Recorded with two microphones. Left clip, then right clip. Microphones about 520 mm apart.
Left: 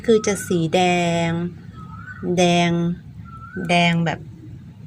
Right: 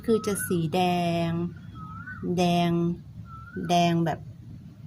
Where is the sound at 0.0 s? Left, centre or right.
Right.